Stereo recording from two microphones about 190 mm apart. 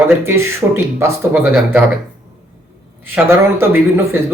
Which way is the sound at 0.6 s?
15° right (ahead or behind).